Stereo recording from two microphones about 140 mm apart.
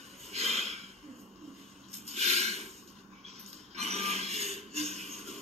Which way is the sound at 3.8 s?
50° right (ahead or behind).